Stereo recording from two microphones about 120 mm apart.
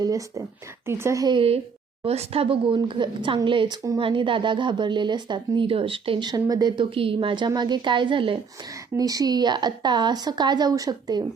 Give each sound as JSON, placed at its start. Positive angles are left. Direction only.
{"t": 0.0, "sound": "speech", "side_deg": -30}
{"t": 1.3, "sound": "a woman's voice", "side_deg": -50}
{"t": 9.0, "sound": "a woman's voice", "side_deg": -30}